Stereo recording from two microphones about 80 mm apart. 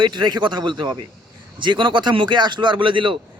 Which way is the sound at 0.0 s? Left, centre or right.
Right.